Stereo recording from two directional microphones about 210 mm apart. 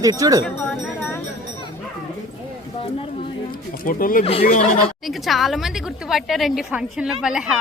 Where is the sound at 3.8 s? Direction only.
40° left (ahead or behind).